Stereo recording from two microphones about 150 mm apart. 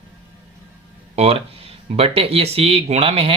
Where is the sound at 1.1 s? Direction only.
40° right (ahead or behind).